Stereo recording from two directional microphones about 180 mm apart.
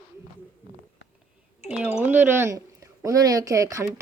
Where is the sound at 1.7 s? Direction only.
5° right (ahead or behind).